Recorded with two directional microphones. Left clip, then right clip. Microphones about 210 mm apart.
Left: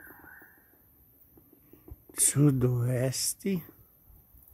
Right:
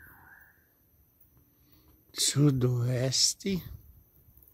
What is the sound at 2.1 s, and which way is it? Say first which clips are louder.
Speech: even; 5° right (ahead or behind).